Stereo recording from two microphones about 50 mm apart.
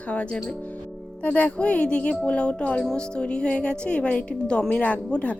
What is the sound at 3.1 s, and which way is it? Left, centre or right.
A woman's voice, left.